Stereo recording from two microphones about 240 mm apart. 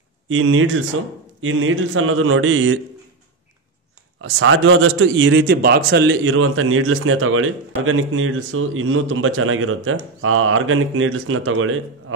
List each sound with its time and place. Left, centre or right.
0.3 s a man's voice: right
4.2 s a man's voice: right